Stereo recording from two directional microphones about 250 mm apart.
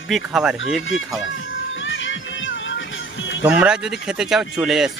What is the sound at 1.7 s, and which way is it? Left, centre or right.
Music, left.